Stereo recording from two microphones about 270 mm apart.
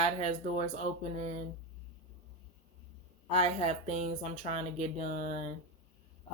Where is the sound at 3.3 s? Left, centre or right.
Right.